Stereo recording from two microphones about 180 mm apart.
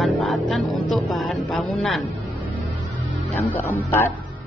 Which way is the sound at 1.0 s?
Centre (ahead or behind).